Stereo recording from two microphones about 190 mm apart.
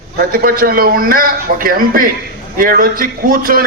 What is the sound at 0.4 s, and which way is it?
A man's voice, 50° right (ahead or behind).